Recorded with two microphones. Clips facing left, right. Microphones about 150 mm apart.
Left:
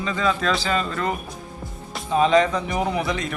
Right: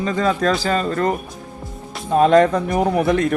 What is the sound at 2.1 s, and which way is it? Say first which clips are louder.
Speech: right 5 dB; 55° right (ahead or behind).